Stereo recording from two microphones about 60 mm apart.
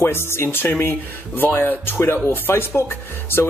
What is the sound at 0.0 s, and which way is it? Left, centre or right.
Speech, left.